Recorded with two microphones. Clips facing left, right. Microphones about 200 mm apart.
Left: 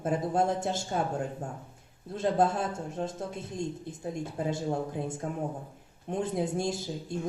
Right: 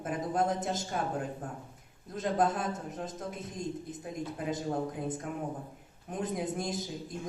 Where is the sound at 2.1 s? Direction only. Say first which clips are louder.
Left 3 dB; 30° left (ahead or behind).